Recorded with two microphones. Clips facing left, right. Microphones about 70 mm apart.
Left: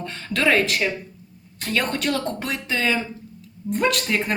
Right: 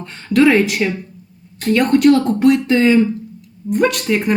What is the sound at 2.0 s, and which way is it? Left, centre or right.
Speech, centre.